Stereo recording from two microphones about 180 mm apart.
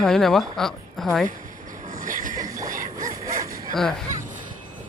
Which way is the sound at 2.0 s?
50° right (ahead or behind).